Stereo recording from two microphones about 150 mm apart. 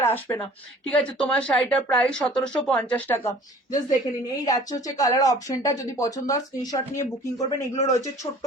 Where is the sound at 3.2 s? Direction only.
25° left (ahead or behind).